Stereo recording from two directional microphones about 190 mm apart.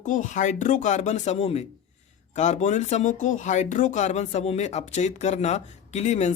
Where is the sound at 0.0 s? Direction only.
40° left (ahead or behind).